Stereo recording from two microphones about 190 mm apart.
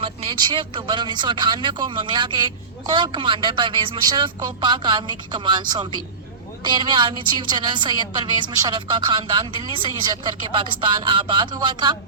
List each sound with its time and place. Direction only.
0.0 s a woman's voice: 30° right (ahead or behind)